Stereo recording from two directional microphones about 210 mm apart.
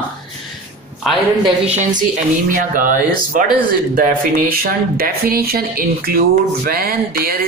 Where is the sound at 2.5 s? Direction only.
40° right (ahead or behind).